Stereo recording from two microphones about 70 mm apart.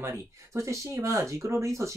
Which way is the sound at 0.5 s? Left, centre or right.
Right.